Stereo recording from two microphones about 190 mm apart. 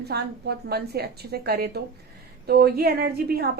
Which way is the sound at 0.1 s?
60° right (ahead or behind).